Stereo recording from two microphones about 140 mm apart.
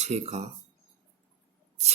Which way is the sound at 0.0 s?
55° right (ahead or behind).